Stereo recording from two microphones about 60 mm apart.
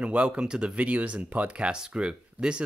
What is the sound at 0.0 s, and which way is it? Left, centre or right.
Speech, right.